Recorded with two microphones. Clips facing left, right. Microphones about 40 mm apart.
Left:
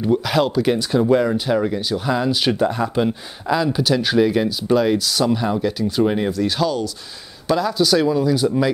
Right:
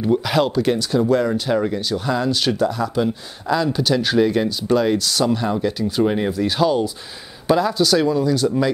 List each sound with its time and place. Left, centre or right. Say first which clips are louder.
0.0 s speech: even; centre
0.7 s speech: left 1 dB; centre
2.6 s speech: left 1 dB; left
3.5 s speech: even; centre